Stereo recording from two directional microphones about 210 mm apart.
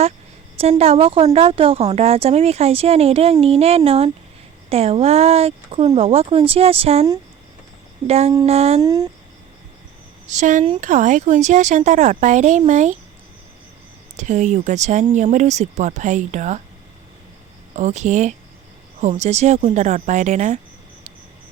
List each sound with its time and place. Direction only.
0.6 s a woman's voice: 30° right (ahead or behind)
8.8 s speech: 20° right (ahead or behind)
10.3 s speech: 35° right (ahead or behind)
14.2 s speech: 35° right (ahead or behind)
17.7 s speech: 35° right (ahead or behind)